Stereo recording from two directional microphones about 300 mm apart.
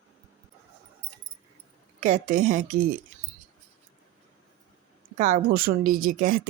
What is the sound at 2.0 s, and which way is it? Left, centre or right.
Speech, right.